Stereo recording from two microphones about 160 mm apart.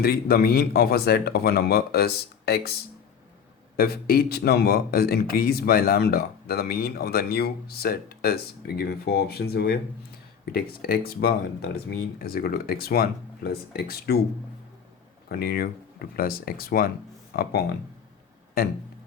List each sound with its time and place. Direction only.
0.0 s speech: 70° left (ahead or behind)
3.8 s speech: 75° left (ahead or behind)
10.4 s speech: 75° left (ahead or behind)
15.3 s speech: 70° left (ahead or behind)